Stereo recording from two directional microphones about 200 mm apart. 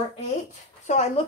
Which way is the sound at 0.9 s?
35° left (ahead or behind).